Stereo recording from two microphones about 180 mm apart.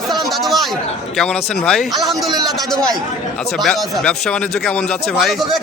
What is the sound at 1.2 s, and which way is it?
Speech, 5° left (ahead or behind).